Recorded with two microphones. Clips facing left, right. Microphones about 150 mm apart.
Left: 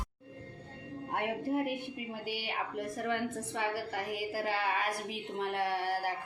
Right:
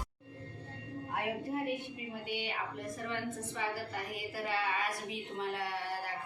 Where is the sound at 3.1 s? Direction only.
85° left.